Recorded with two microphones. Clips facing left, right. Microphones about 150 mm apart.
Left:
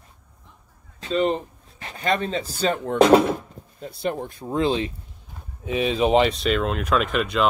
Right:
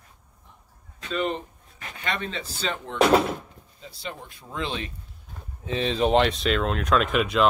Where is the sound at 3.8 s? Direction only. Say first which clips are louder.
Left 11 dB; 55° left (ahead or behind); by 4.8 s 35° left (ahead or behind).